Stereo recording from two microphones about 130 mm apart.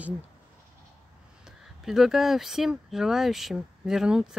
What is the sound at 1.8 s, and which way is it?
Speech, 5° right (ahead or behind).